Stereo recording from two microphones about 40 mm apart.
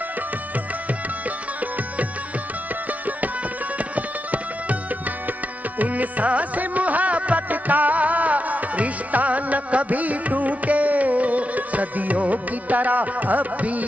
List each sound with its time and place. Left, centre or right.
3.7 s music: right
5.8 s music: right